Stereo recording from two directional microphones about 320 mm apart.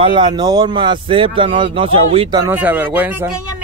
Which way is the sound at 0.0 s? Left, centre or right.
Centre.